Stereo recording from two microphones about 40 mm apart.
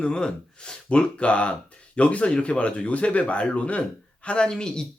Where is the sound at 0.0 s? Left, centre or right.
Left.